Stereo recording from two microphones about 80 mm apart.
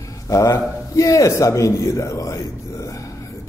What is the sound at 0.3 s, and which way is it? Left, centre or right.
A man's voice, left.